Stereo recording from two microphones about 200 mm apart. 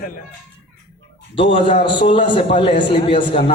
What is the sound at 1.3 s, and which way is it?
A man's voice, 25° left (ahead or behind).